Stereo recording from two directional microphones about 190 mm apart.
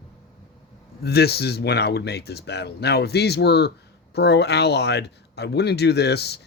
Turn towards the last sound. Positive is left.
turn(degrees=60)  # may be behind; listen again after turning